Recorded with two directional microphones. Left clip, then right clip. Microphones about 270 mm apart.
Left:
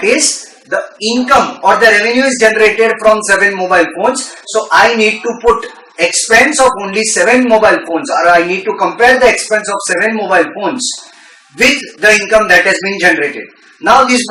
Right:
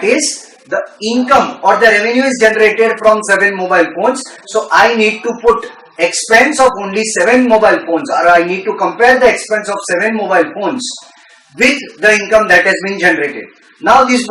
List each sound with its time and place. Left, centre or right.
0.7 s speech: centre
5.3 s speech: centre
5.5 s speech: centre